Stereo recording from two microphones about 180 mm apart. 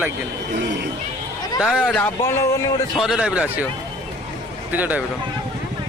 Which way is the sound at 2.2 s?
15° left (ahead or behind).